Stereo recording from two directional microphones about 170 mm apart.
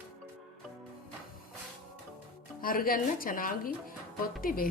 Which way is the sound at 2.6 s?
55° left (ahead or behind).